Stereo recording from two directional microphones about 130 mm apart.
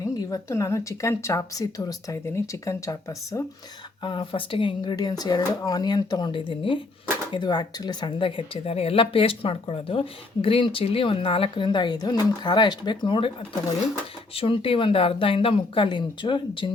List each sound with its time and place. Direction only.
0.0 s a woman's voice: 25° left (ahead or behind)
4.0 s speech: 40° left (ahead or behind)